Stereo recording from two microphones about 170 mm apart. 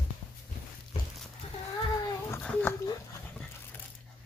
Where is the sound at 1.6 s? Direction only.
20° left (ahead or behind).